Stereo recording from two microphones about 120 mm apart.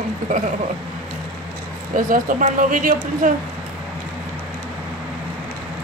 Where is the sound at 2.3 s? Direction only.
90° right.